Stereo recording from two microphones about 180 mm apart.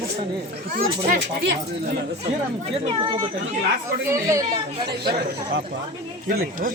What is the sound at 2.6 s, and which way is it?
Speech, 35° right (ahead or behind).